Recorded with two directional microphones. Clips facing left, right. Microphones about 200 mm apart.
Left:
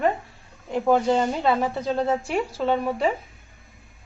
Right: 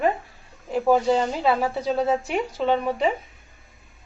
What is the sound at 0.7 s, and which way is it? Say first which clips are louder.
Speech: right 1 dB; 5° right (ahead or behind).